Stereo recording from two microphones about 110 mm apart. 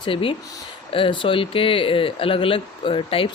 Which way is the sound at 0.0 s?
55° left (ahead or behind).